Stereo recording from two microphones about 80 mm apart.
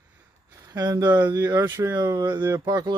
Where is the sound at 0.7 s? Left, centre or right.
Right.